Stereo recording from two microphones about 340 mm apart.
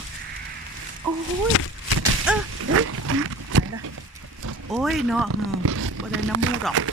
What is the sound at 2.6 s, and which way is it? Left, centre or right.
Wild animals, right.